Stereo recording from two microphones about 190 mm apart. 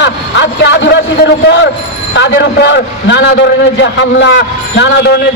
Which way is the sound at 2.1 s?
70° left (ahead or behind).